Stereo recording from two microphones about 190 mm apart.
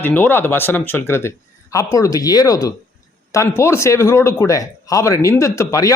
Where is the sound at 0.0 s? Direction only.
10° left (ahead or behind).